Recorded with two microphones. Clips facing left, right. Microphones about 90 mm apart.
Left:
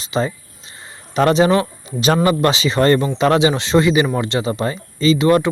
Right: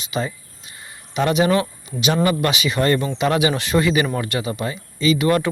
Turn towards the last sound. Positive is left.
turn(degrees=25)  # may be behind; listen again after turning